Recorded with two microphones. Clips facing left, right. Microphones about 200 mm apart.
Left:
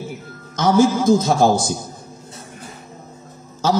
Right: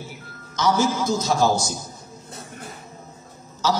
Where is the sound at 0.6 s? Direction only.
50° left (ahead or behind).